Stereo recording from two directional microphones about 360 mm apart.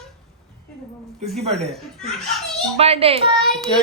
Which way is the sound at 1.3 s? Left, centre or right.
Centre.